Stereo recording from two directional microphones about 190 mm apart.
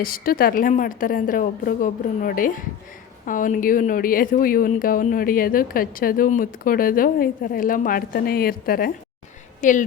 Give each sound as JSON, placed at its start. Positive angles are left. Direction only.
{"t": 0.0, "sound": "speech", "side_deg": 50}